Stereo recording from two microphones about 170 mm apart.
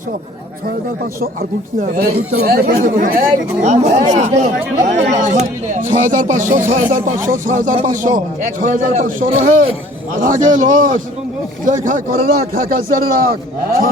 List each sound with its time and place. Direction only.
1.2 s a man's voice: 60° right (ahead or behind)